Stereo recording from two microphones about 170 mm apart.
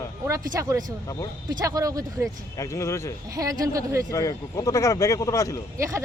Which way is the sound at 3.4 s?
20° right (ahead or behind).